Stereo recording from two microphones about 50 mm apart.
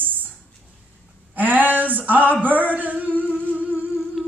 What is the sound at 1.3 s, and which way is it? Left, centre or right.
Speech, right.